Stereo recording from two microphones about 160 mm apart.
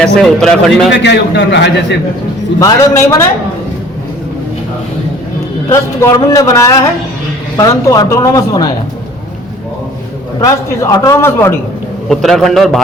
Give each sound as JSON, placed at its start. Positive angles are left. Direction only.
{"t": 0.0, "sound": "speech", "side_deg": 5}
{"t": 0.9, "sound": "a man's voice", "side_deg": 90}
{"t": 2.6, "sound": "a man's voice", "side_deg": 20}
{"t": 5.6, "sound": "a man's voice", "side_deg": 15}
{"t": 10.4, "sound": "a man's voice", "side_deg": 20}
{"t": 12.0, "sound": "speech", "side_deg": 0}